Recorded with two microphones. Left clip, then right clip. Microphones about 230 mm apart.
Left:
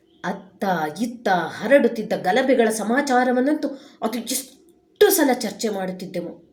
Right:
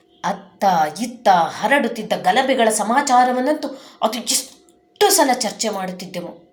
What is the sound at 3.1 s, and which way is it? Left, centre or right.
Speech, right.